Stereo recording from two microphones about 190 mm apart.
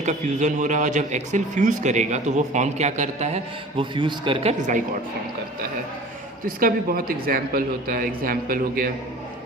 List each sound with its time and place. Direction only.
0.0 s a man's voice: 40° right (ahead or behind)
6.4 s speech: 50° right (ahead or behind)